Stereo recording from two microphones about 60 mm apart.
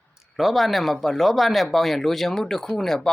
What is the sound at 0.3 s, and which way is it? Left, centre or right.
Speech, centre.